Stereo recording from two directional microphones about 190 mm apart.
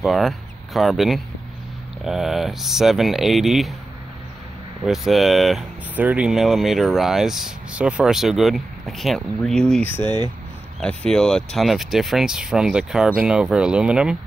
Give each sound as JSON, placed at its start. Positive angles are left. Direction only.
{"t": 0.0, "sound": "speech", "side_deg": 0}
{"t": 4.8, "sound": "speech", "side_deg": 0}
{"t": 10.0, "sound": "speech", "side_deg": -20}
{"t": 10.8, "sound": "speech", "side_deg": 5}